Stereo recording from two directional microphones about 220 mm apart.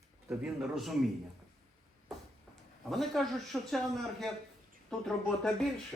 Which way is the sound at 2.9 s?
Centre (ahead or behind).